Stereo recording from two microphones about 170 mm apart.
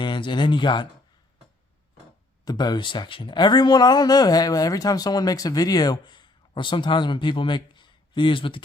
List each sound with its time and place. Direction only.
0.0 s speech: 25° left (ahead or behind)
2.4 s speech: 25° left (ahead or behind)